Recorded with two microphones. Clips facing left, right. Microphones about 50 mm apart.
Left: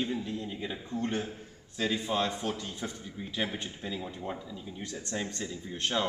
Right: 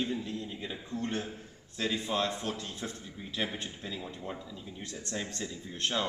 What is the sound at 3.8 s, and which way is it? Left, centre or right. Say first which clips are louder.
Speech: left 3 dB; centre.